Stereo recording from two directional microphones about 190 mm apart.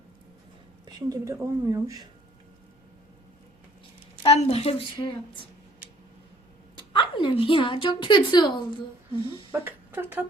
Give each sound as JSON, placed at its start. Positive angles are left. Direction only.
{"t": 0.9, "sound": "speech", "side_deg": -20}
{"t": 4.2, "sound": "a woman's voice", "side_deg": 30}
{"t": 6.7, "sound": "a woman's voice", "side_deg": 25}
{"t": 9.5, "sound": "speech", "side_deg": -10}